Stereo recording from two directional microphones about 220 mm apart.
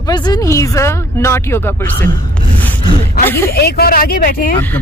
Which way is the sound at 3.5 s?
45° left (ahead or behind).